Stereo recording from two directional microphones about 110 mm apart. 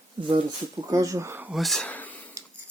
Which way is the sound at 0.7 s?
30° right (ahead or behind).